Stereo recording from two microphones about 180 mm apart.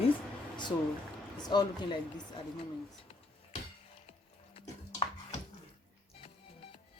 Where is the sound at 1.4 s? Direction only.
25° left (ahead or behind).